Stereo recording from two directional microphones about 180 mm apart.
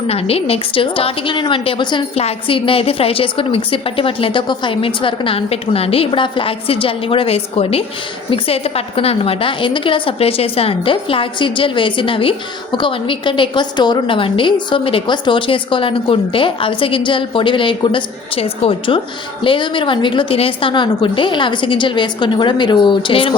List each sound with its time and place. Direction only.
0.1 s a woman's voice: 35° left (ahead or behind)